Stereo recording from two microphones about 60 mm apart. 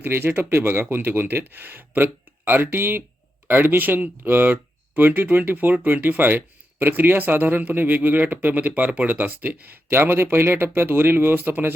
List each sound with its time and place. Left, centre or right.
0.0 s speech: right